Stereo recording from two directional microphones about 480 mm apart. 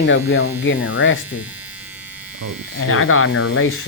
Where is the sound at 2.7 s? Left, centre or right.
Left.